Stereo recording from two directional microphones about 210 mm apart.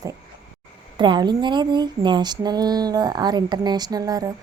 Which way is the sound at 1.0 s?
20° right (ahead or behind).